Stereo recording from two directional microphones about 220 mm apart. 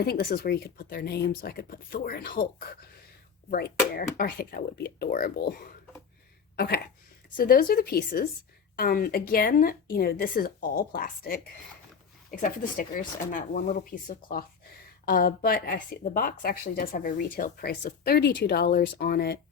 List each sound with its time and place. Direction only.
0.0 s speech: 45° left (ahead or behind)
12.4 s speech: 35° left (ahead or behind)